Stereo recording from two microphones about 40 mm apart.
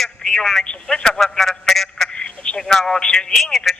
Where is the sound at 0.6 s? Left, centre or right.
Left; by 2.0 s centre.